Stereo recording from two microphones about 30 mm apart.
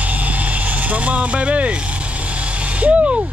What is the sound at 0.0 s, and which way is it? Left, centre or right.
Vehicle, right.